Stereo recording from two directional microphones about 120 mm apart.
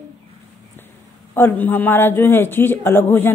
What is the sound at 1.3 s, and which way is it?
A man's voice, 15° left (ahead or behind).